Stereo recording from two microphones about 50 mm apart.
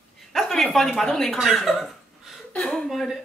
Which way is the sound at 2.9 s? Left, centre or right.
Centre.